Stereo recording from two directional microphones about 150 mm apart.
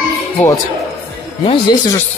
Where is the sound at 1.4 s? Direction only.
35° left (ahead or behind).